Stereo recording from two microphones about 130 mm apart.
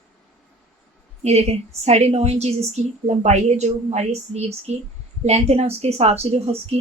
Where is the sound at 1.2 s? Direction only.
55° right (ahead or behind).